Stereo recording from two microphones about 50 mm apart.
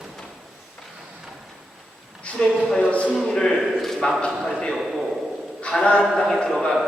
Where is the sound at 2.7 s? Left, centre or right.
Left.